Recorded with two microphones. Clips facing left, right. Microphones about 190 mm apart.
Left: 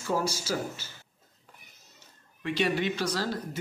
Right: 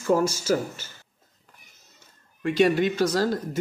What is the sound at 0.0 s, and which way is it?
Speech, 50° right (ahead or behind).